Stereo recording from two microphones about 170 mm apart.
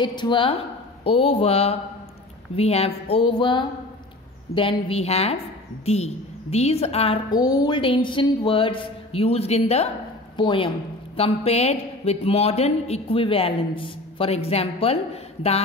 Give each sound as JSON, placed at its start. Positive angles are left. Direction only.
{"t": 0.0, "sound": "a woman's voice", "side_deg": 25}
{"t": 7.2, "sound": "a man's voice", "side_deg": 25}